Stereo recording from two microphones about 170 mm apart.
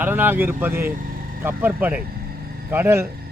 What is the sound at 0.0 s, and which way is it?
A man's voice, 10° right (ahead or behind).